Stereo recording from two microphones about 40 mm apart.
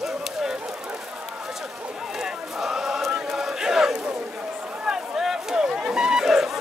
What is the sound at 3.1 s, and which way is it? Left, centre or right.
Crowd, centre.